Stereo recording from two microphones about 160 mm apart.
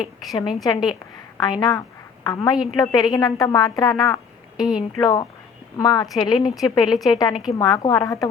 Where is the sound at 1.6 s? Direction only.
25° left (ahead or behind).